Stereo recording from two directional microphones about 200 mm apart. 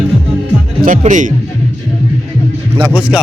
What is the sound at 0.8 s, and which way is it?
Speech, 40° right (ahead or behind).